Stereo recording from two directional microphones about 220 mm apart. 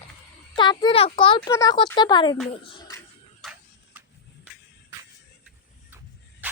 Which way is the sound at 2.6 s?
15° left (ahead or behind).